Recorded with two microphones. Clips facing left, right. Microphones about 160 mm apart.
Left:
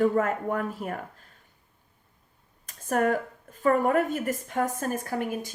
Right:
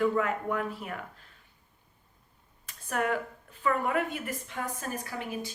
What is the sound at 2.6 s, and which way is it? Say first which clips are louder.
Speech: left 6 dB; 45° left (ahead or behind).